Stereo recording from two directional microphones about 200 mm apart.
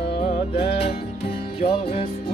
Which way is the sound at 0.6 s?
30° left (ahead or behind).